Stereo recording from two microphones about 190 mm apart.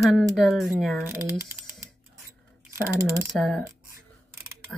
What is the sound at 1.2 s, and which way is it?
Speech, 15° right (ahead or behind).